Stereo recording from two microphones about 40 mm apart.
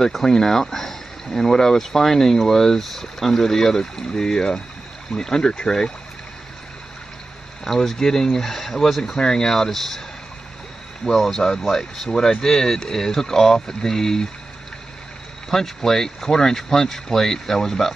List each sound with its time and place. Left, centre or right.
0.0 s speech: centre
7.6 s speech: centre
11.1 s speech: centre
15.5 s speech: centre